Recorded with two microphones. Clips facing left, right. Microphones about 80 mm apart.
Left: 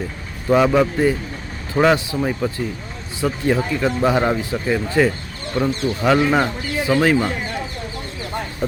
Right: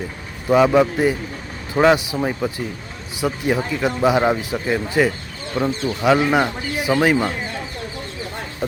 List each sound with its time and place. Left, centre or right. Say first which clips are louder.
0.4 s speech: right 1 dB; centre